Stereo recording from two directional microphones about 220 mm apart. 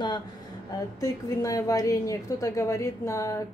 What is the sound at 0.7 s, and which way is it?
A woman's voice, 15° left (ahead or behind).